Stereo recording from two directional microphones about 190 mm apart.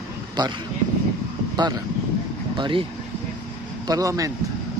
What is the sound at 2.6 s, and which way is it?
Speech, 25° right (ahead or behind).